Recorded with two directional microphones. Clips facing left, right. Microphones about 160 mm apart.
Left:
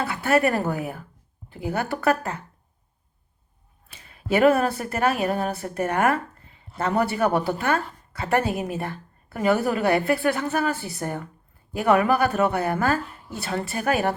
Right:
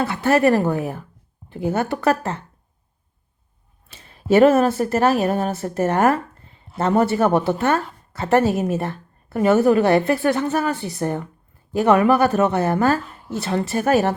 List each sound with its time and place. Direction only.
0.2 s a woman's voice: 20° right (ahead or behind)
3.9 s a woman's voice: 30° right (ahead or behind)